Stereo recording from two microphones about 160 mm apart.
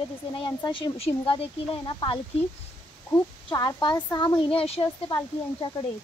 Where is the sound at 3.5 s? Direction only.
25° left (ahead or behind).